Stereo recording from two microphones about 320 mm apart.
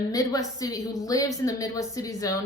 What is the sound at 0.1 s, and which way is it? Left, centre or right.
A woman's voice, centre.